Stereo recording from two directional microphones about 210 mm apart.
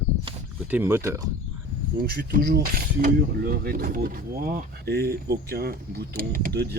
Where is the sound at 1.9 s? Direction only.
45° right (ahead or behind).